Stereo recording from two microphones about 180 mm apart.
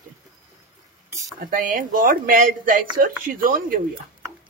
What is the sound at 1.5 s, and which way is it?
A man's voice, 50° right (ahead or behind).